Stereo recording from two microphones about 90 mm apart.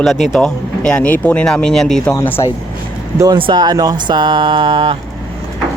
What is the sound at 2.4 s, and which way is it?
Speech, 45° left (ahead or behind).